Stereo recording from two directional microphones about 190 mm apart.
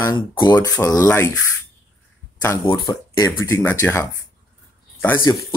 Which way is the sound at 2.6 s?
20° left (ahead or behind).